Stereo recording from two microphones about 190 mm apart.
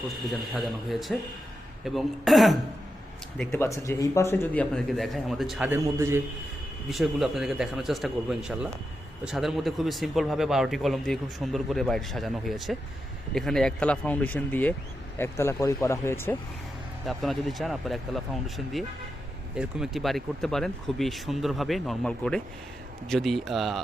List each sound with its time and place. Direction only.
0.3 s speech: centre (ahead or behind)
3.5 s speech: 15° left (ahead or behind); by 6.2 s 15° right (ahead or behind)
6.8 s speech: centre (ahead or behind)
17.1 s speech: centre (ahead or behind)